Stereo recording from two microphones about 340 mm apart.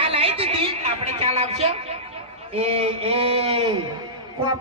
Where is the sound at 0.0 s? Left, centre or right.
Centre.